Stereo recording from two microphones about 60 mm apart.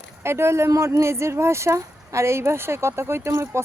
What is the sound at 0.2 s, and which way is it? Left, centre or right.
Speech, right.